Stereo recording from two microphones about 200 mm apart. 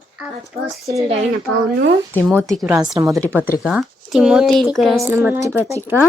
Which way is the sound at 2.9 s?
15° right (ahead or behind).